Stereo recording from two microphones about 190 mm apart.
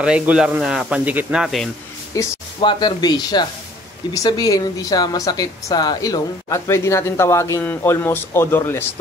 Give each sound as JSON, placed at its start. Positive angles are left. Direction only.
{"t": 0.0, "sound": "speech", "side_deg": -5}
{"t": 2.1, "sound": "speech", "side_deg": 25}